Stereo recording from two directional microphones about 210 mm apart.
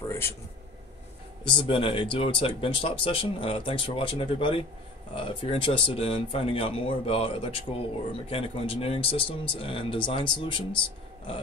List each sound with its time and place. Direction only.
1.4 s speech: 25° left (ahead or behind)